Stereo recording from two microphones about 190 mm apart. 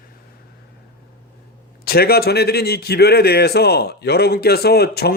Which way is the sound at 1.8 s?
55° left (ahead or behind).